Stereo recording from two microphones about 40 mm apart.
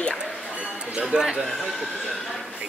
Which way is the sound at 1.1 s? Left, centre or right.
Centre.